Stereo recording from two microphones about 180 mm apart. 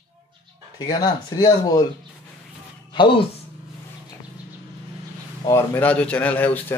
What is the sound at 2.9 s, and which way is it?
Speech, 25° left (ahead or behind).